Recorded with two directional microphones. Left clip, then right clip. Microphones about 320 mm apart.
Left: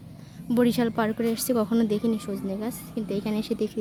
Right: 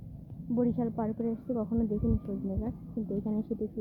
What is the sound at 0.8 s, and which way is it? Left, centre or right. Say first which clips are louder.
Speech: left 8 dB; left.